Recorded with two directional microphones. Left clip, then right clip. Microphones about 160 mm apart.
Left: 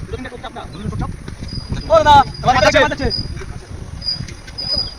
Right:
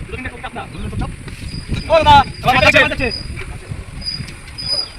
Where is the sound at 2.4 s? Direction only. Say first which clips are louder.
Right 1 dB; 25° right (ahead or behind).